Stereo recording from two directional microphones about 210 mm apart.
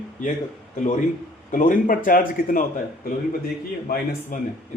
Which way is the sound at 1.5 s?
40° left (ahead or behind).